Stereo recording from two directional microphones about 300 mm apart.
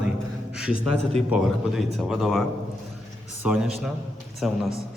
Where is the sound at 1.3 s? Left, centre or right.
Centre.